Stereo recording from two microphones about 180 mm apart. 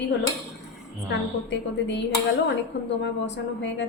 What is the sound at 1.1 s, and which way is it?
A woman's voice, 80° left.